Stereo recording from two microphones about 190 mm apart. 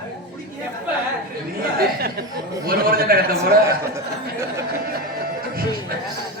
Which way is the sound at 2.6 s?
50° right (ahead or behind).